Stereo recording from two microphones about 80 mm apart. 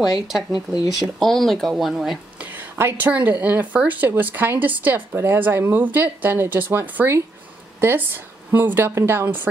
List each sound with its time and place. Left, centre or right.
0.1 s speech: centre
2.3 s a sound: right
3.1 s speech: right
5.1 s speech: right